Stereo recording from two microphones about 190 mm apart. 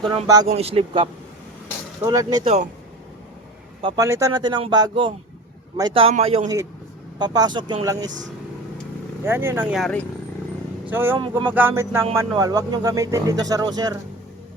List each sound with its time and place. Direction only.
0.1 s speech: 20° right (ahead or behind)
0.4 s speech: 30° right (ahead or behind)
2.0 s speech: 20° right (ahead or behind)
3.8 s speech: 25° right (ahead or behind)
4.0 s speech: 15° right (ahead or behind); by 6.5 s 35° right (ahead or behind)
7.2 s speech: 20° right (ahead or behind)
9.2 s speech: 10° right (ahead or behind); by 10.1 s 5° left (ahead or behind)
10.8 s speech: 10° right (ahead or behind)